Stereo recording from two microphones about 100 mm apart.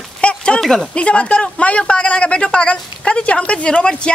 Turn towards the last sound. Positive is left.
turn(degrees=10)  # may be behind; listen again after turning